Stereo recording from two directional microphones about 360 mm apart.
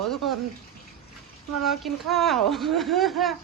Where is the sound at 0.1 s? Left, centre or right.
Centre.